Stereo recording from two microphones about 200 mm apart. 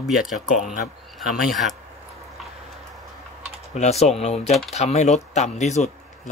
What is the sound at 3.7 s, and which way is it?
Speech, 35° left (ahead or behind).